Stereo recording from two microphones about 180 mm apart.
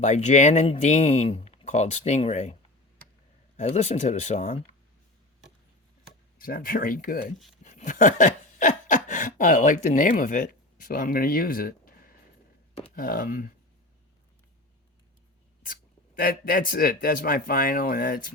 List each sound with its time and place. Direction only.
0.0 s speech: 40° left (ahead or behind)
3.6 s speech: 35° left (ahead or behind)
6.4 s speech: 50° left (ahead or behind)
7.6 s a sound: 40° left (ahead or behind)
13.0 s speech: 50° left (ahead or behind)
16.1 s speech: 55° left (ahead or behind)